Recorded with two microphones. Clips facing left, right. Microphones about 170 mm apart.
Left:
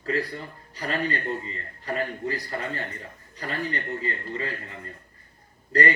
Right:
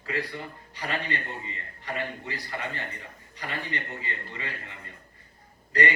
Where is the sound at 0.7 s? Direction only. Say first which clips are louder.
Left 4 dB; 40° left (ahead or behind).